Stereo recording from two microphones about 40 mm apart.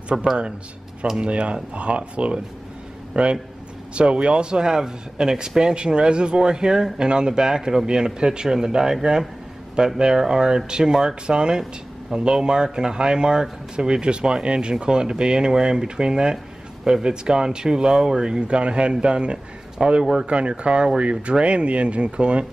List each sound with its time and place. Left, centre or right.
0.1 s speech: centre
1.1 s speech: right
19.8 s speech: centre
20.2 s speech: right